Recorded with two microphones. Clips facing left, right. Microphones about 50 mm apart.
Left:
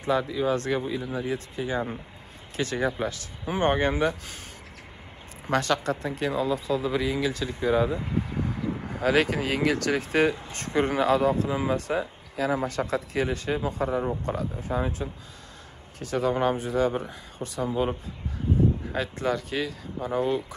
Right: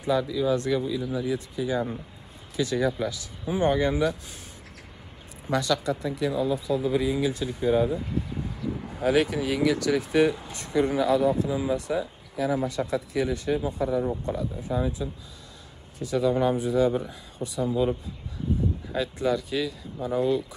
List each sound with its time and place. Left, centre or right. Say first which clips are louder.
0.2 s speech: right 1 dB; left
2.5 s speech: right 2 dB; left
5.5 s speech: even; left
7.4 s speech: even; left
8.2 s vehicle: left 3 dB; left
9.0 s speech: even; left